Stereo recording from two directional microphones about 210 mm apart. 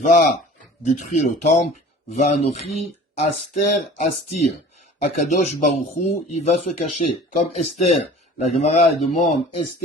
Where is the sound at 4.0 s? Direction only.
30° left (ahead or behind).